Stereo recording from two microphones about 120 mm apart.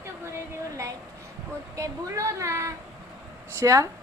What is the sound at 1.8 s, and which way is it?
A woman's voice, 25° right (ahead or behind).